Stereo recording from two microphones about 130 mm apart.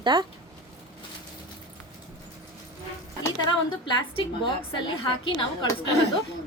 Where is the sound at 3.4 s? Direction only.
35° left (ahead or behind).